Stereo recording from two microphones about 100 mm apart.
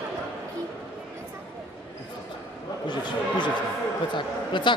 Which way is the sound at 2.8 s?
50° left (ahead or behind).